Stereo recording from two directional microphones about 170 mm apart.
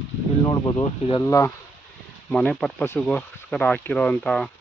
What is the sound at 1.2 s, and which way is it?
Speech, 20° left (ahead or behind).